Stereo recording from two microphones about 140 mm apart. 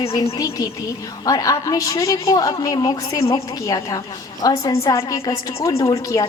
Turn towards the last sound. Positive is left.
turn(degrees=20)  # may be behind; listen again after turning